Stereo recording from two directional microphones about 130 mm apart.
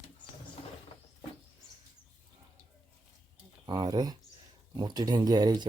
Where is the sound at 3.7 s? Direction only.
30° right (ahead or behind).